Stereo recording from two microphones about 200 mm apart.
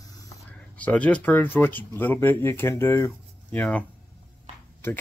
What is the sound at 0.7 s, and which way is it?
Speech, 5° left (ahead or behind).